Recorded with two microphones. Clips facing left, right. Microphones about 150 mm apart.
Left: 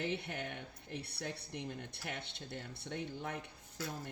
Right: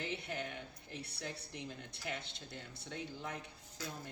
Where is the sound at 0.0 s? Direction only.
60° left (ahead or behind).